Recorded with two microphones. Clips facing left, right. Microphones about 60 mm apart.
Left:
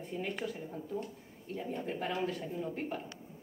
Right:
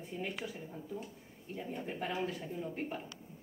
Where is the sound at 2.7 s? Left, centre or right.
Centre.